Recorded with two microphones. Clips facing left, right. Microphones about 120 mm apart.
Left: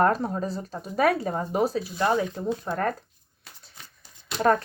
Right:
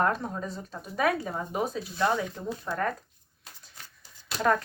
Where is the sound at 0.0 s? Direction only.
40° left (ahead or behind).